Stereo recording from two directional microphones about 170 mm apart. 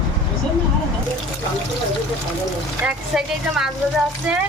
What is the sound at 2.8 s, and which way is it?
Speech, 5° right (ahead or behind).